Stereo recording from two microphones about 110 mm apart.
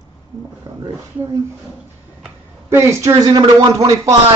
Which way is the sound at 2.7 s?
25° right (ahead or behind).